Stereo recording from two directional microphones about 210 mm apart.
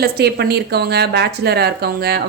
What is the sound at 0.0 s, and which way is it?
Speech, 50° right (ahead or behind).